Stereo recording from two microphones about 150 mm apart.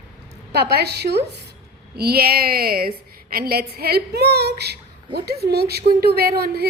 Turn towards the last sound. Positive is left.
turn(degrees=-90)